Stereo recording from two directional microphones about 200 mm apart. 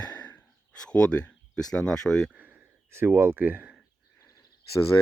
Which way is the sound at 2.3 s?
10° right (ahead or behind).